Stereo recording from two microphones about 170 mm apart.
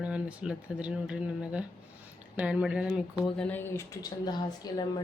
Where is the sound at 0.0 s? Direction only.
5° right (ahead or behind).